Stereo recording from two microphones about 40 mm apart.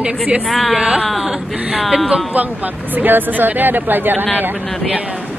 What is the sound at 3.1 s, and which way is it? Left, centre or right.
Speech, right.